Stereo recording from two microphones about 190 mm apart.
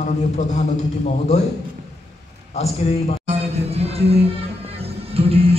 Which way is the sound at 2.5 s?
35° left (ahead or behind).